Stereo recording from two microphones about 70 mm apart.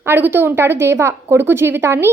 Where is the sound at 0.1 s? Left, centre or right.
Right.